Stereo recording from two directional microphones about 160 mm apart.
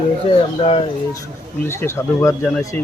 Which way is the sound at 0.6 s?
40° left (ahead or behind).